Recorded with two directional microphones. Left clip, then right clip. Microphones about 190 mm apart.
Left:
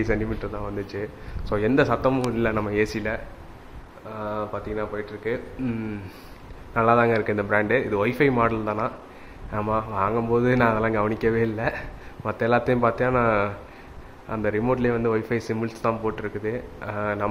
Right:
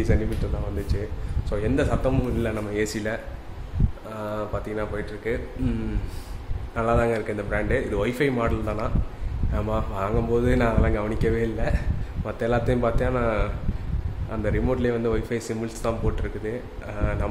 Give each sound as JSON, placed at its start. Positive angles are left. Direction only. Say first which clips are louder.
{"t": 1.5, "sound": "speech", "louder": "left 4 dB", "side_deg": 20}
{"t": 4.2, "sound": "speech", "louder": "left 1 dB", "side_deg": 10}